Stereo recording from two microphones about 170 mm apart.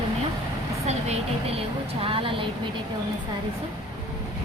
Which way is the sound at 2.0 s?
30° right (ahead or behind).